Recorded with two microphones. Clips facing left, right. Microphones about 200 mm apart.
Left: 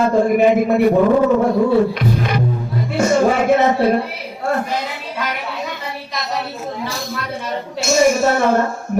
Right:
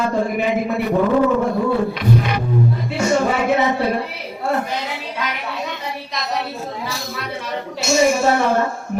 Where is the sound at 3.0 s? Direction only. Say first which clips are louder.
Left 4 dB; 50° left (ahead or behind).